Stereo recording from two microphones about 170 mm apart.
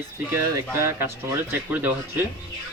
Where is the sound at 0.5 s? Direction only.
15° right (ahead or behind).